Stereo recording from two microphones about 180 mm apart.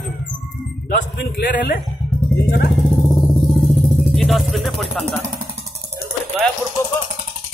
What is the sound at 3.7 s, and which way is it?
Music, centre (ahead or behind).